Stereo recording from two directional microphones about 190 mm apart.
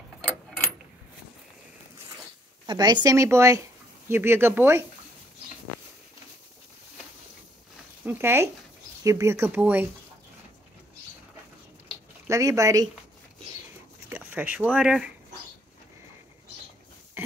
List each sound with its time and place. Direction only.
2.6 s speech: 25° right (ahead or behind)
8.0 s speech: 10° right (ahead or behind)
12.3 s speech: 15° right (ahead or behind)
14.0 s speech: 10° right (ahead or behind)